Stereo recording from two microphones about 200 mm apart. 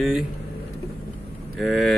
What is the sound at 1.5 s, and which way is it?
Speech, centre (ahead or behind).